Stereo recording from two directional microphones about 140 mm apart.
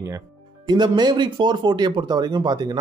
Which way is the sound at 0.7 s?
30° right (ahead or behind).